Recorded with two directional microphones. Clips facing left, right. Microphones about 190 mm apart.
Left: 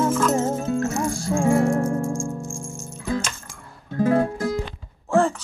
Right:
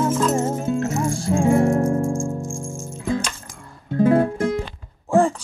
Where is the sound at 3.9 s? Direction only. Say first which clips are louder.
Right 3 dB; 25° right (ahead or behind).